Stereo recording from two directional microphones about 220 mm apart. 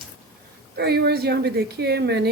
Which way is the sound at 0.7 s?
50° right (ahead or behind).